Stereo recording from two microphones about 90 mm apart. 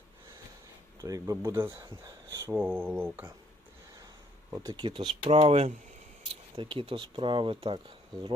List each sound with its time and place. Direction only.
1.0 s speech: 40° right (ahead or behind)
4.6 s speech: 60° right (ahead or behind); by 8.3 s 80° right